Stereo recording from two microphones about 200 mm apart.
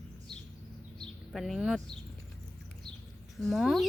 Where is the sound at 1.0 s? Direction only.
Centre (ahead or behind).